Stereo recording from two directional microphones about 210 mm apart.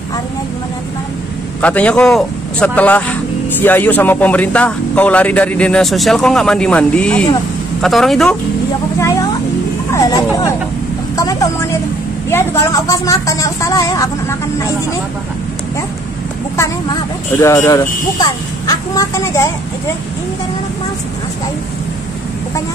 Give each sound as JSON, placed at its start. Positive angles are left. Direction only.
{"t": 1.6, "sound": "a man's voice", "side_deg": 5}
{"t": 9.0, "sound": "a man's voice", "side_deg": 15}
{"t": 16.5, "sound": "a man's voice", "side_deg": 15}